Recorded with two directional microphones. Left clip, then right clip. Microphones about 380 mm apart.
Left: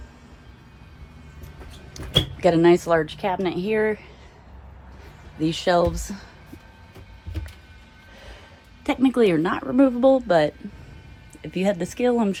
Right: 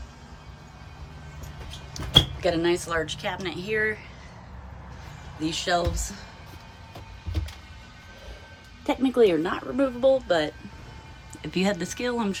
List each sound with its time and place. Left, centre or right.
2.0 s a sound: centre
2.4 s speech: centre
5.4 s speech: centre
8.8 s speech: centre
11.4 s speech: centre